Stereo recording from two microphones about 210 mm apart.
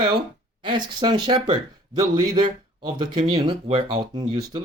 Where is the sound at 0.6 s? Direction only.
20° right (ahead or behind).